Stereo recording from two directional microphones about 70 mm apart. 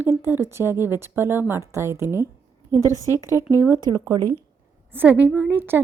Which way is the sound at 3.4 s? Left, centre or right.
Right.